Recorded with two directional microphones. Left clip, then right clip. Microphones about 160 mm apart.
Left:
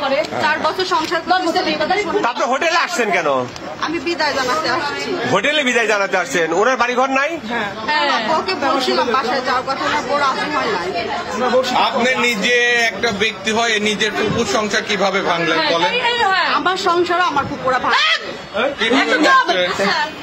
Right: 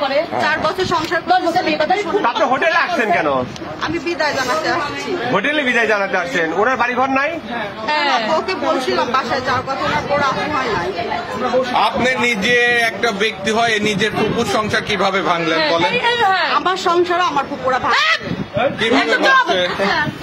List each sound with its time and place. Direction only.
0.4 s speech: 10° right (ahead or behind)
1.3 s a woman's voice: 90° right
2.2 s speech: 75° left (ahead or behind)
4.2 s a man's voice: centre (ahead or behind)
5.3 s a man's voice: 60° left (ahead or behind)
8.3 s a man's voice: centre (ahead or behind)
11.7 s a man's voice: 30° right (ahead or behind)
15.9 s a woman's voice: 90° right
16.4 s a man's voice: centre (ahead or behind)
19.0 s a man's voice: 35° right (ahead or behind)